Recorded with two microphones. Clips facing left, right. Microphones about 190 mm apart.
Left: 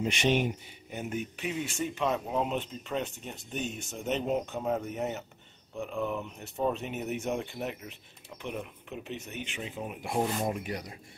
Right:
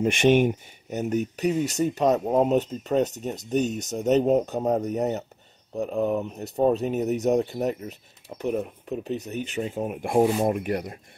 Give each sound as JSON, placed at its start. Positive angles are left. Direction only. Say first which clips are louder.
{"t": 0.0, "sound": "speech", "louder": "right 8 dB", "side_deg": -50}